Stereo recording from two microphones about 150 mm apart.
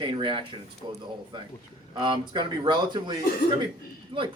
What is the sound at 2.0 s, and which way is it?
Speech, 30° right (ahead or behind).